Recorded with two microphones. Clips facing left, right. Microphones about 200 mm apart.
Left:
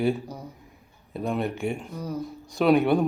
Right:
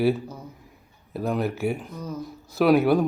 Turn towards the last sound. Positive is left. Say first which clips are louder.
# right 1 dB
turn(degrees=-5)  # may be behind; listen again after turning